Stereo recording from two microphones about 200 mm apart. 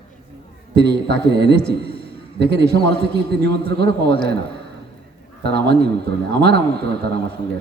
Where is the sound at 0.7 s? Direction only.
60° right (ahead or behind).